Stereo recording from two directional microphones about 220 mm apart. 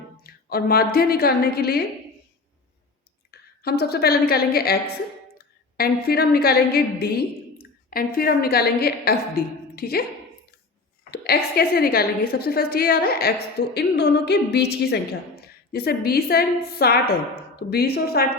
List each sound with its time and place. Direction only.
0.2 s a woman's voice: 45° left (ahead or behind)
3.6 s a woman's voice: 45° left (ahead or behind)
11.1 s a woman's voice: 45° left (ahead or behind)